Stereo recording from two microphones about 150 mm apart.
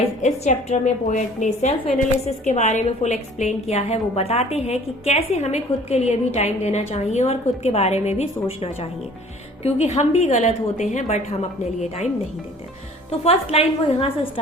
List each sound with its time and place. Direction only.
0.2 s a woman's voice: 50° left (ahead or behind)
13.1 s a woman's voice: 40° left (ahead or behind)